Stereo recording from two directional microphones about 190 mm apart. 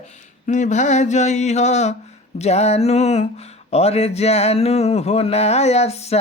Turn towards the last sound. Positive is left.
turn(degrees=35)  # may be behind; listen again after turning